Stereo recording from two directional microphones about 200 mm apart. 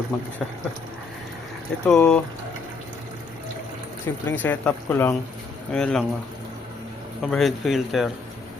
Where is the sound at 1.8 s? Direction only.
5° left (ahead or behind).